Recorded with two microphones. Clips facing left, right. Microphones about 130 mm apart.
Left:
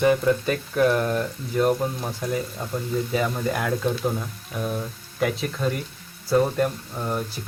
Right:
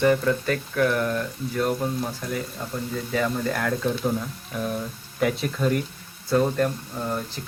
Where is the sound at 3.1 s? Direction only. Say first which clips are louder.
Right 2 dB; 15° left (ahead or behind).